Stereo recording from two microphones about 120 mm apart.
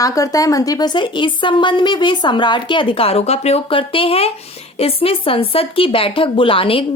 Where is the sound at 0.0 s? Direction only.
30° left (ahead or behind).